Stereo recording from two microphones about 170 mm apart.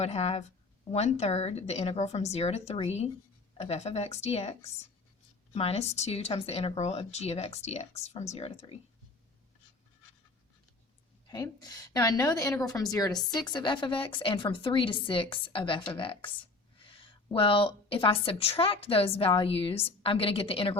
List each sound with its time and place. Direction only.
0.0 s speech: 40° left (ahead or behind)
5.5 s speech: 35° left (ahead or behind)
11.3 s a woman's voice: 20° left (ahead or behind)